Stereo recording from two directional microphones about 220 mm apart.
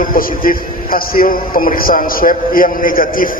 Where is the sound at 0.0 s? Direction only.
40° left (ahead or behind).